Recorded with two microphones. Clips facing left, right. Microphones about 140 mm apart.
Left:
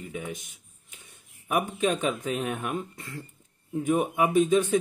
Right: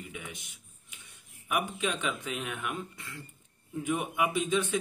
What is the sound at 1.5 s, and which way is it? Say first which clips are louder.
Speech: left 6 dB; 40° left (ahead or behind).